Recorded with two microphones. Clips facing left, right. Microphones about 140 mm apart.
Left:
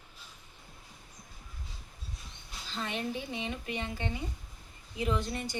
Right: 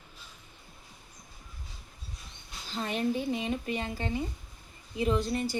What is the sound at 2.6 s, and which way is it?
Speech, 40° right (ahead or behind).